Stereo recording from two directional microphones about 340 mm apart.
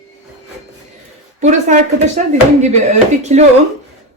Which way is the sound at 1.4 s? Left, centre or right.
Right.